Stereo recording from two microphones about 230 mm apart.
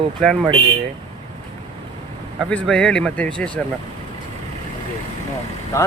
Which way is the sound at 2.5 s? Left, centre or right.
Centre.